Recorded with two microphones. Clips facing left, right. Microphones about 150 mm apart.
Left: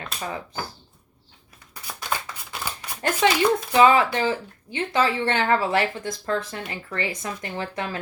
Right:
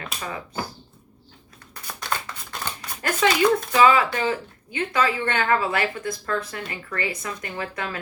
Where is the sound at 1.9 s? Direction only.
10° left (ahead or behind).